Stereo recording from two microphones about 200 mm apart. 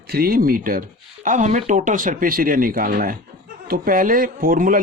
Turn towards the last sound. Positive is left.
turn(degrees=-45)  # may be behind; listen again after turning